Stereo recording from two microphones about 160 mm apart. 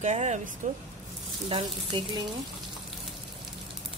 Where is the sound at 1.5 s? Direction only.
30° right (ahead or behind).